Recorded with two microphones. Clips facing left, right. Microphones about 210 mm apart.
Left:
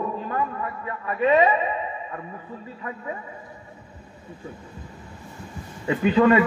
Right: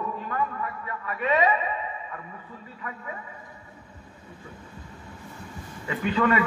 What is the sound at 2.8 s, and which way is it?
Speech, 30° left (ahead or behind).